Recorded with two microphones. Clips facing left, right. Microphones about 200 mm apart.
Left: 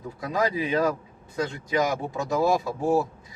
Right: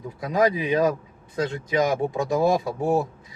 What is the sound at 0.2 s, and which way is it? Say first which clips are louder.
Speech: right 4 dB; 20° right (ahead or behind).